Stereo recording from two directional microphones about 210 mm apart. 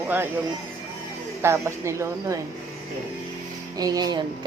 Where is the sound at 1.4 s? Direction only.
10° right (ahead or behind).